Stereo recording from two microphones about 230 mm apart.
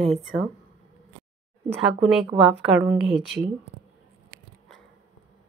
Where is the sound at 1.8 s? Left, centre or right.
Centre.